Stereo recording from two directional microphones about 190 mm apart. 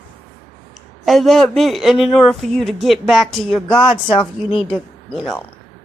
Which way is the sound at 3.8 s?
25° left (ahead or behind).